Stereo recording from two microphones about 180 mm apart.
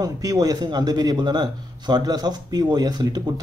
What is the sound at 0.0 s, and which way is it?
Speech, 20° right (ahead or behind).